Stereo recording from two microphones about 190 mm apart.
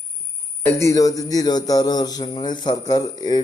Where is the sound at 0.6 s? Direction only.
15° left (ahead or behind).